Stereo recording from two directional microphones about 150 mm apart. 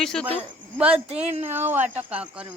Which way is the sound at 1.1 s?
45° right (ahead or behind).